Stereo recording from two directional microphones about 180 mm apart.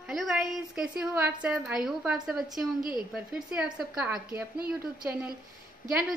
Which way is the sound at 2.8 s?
25° left (ahead or behind).